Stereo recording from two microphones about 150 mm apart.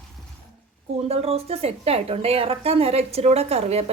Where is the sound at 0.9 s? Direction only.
45° right (ahead or behind).